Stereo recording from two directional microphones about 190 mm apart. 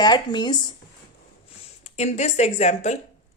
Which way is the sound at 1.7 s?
35° left (ahead or behind).